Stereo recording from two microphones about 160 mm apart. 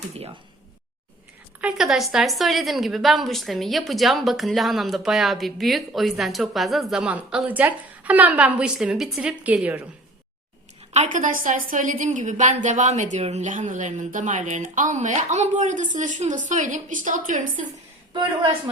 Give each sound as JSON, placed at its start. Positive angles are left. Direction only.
{"t": 1.6, "sound": "a woman's voice", "side_deg": 0}
{"t": 10.9, "sound": "speech", "side_deg": -50}
{"t": 18.1, "sound": "a woman's voice", "side_deg": -30}